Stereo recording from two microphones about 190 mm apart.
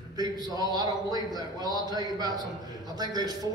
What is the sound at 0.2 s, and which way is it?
A man's voice, 20° right (ahead or behind).